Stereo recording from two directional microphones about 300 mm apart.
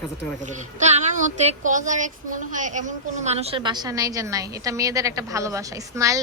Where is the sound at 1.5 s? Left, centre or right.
Right.